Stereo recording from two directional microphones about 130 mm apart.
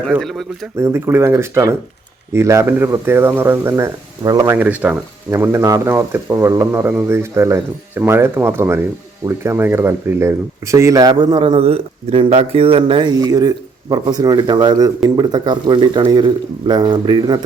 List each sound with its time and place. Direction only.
0.2 s speech: centre (ahead or behind)
0.8 s speech: 20° right (ahead or behind)
4.2 s speech: 30° right (ahead or behind)
4.5 s speech: 10° right (ahead or behind); by 17.4 s 35° right (ahead or behind)